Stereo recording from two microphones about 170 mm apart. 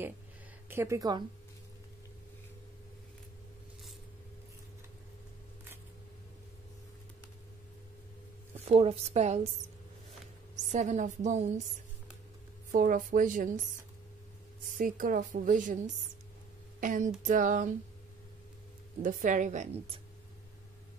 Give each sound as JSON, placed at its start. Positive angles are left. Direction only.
{"t": 0.7, "sound": "speech", "side_deg": -15}
{"t": 8.5, "sound": "a woman's voice", "side_deg": -35}
{"t": 10.7, "sound": "a woman's voice", "side_deg": -45}
{"t": 12.7, "sound": "a woman's voice", "side_deg": -50}
{"t": 14.8, "sound": "a woman's voice", "side_deg": -55}
{"t": 19.0, "sound": "a woman's voice", "side_deg": -50}